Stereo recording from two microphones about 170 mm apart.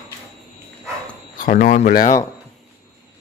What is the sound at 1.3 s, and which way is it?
Speech, 55° left (ahead or behind).